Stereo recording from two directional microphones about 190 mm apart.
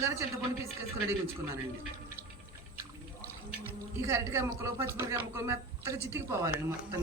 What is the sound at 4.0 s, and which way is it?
Speech, 15° right (ahead or behind).